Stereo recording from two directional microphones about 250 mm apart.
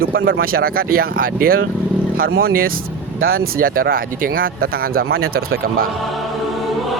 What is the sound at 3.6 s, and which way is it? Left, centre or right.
Speech, right.